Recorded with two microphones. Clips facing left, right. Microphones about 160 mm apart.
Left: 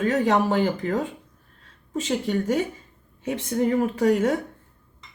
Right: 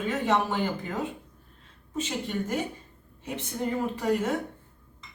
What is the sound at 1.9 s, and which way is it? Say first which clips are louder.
Speech: left 6 dB; 85° left.